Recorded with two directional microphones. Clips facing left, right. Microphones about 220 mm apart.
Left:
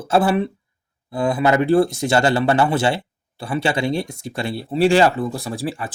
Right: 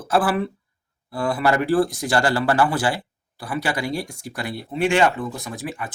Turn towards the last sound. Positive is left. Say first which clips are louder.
# left 5 dB
turn(degrees=30)  # may be behind; listen again after turning